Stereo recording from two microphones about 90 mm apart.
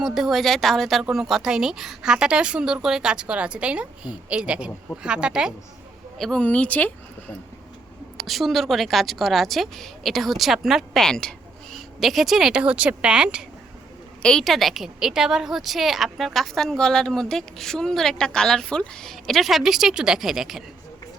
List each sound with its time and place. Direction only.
0.0 s a woman's voice: 5° right (ahead or behind)
6.1 s a woman's voice: centre (ahead or behind)
6.4 s speech: 15° left (ahead or behind)
8.2 s a woman's voice: centre (ahead or behind)
14.2 s a woman's voice: 5° left (ahead or behind)